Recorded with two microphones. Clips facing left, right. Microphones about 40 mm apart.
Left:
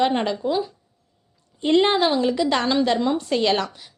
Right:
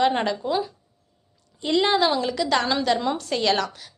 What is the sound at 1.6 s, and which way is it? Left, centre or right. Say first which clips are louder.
Speech: left 3 dB; left.